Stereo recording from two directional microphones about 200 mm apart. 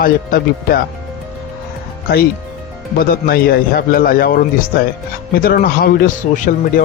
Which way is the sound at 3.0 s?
45° left (ahead or behind).